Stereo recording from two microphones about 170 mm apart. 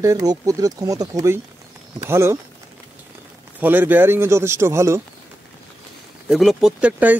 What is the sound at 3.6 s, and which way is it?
Speech, 10° right (ahead or behind).